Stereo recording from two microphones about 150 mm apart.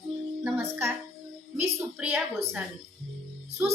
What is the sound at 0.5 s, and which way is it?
Music, 15° right (ahead or behind).